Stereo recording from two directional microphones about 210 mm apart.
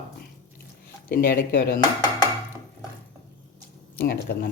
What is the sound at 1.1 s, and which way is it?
Speech, 45° left (ahead or behind).